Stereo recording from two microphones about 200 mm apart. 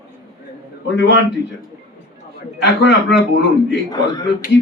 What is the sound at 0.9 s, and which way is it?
Speech, 65° left (ahead or behind).